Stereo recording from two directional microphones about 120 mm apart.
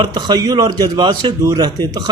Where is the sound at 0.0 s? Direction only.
40° right (ahead or behind).